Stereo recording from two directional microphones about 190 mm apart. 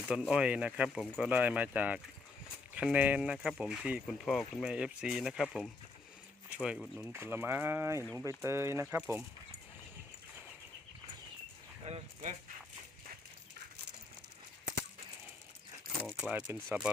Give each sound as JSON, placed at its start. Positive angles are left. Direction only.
{"t": 0.1, "sound": "speech", "side_deg": -5}
{"t": 7.1, "sound": "speech", "side_deg": -10}
{"t": 11.9, "sound": "speech", "side_deg": -35}
{"t": 16.0, "sound": "speech", "side_deg": -5}